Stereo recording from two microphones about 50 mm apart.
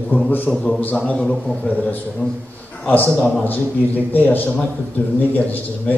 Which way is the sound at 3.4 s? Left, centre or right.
Left.